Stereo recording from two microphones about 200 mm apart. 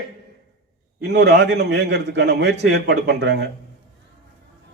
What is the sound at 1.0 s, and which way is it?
A man's voice, 60° right (ahead or behind).